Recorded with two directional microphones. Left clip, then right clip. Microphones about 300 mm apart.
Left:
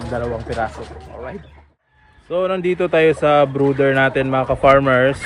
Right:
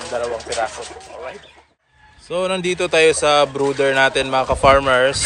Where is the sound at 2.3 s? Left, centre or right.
Centre.